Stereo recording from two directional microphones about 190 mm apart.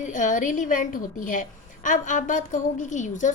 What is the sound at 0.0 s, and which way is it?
A woman's voice, 40° left (ahead or behind).